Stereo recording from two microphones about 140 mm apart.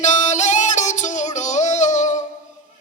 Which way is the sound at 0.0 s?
60° left (ahead or behind).